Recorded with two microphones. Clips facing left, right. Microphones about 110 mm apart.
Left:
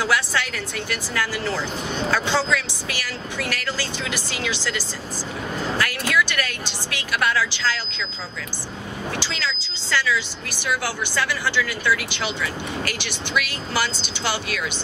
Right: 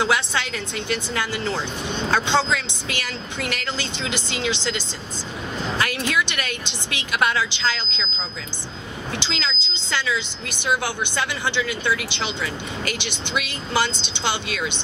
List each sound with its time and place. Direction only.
0.0 s speech: 20° right (ahead or behind)
9.2 s speech: 20° right (ahead or behind)